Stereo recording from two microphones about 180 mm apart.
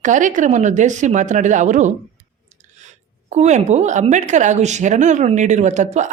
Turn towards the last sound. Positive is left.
turn(degrees=-40)  # may be behind; listen again after turning